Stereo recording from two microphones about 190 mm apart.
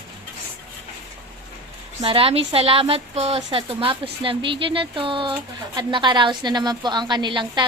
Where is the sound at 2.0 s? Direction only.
30° right (ahead or behind).